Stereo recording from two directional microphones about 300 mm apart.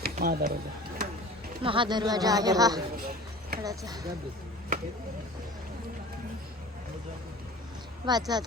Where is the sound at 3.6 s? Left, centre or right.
Centre.